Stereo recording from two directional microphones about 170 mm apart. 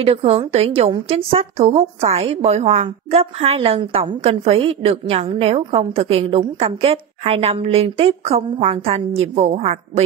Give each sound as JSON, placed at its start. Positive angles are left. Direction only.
{"t": 0.0, "sound": "a woman's voice", "side_deg": -35}